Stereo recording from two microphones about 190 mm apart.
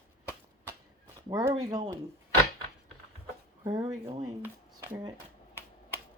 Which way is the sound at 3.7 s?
30° right (ahead or behind).